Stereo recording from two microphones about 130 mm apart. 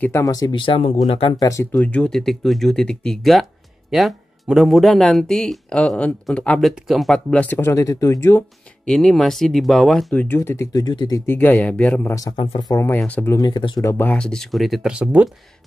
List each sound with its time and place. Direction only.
0.0 s speech: 25° left (ahead or behind); by 1.3 s 45° left (ahead or behind)
1.4 s speech: 20° left (ahead or behind)
1.8 s speech: 10° left (ahead or behind)
7.7 s speech: 25° left (ahead or behind)
8.8 s speech: 5° left (ahead or behind)
10.1 s speech: 15° left (ahead or behind); by 11.2 s 30° left (ahead or behind)
11.2 s speech: 15° left (ahead or behind)
12.4 s speech: 40° left (ahead or behind)
12.7 s speech: 15° left (ahead or behind)
13.4 s speech: 35° left (ahead or behind)
13.9 s speech: 10° left (ahead or behind); by 15.2 s 10° right (ahead or behind)